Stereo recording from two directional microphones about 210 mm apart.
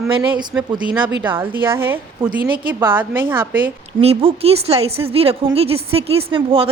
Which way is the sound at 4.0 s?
25° right (ahead or behind).